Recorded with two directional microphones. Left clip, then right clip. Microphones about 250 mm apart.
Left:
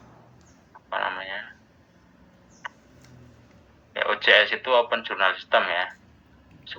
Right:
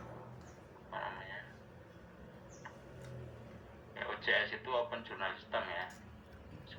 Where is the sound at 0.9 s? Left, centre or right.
Left.